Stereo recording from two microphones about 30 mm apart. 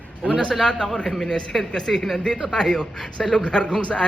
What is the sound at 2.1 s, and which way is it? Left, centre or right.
A man's voice, left.